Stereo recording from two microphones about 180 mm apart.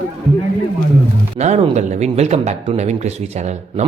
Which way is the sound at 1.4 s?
35° right (ahead or behind).